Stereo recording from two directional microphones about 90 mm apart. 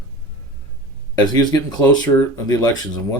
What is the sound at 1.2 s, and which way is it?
Speech, 50° left (ahead or behind).